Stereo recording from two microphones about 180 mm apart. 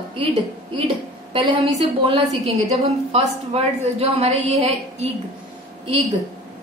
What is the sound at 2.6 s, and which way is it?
A woman's voice, 35° right (ahead or behind).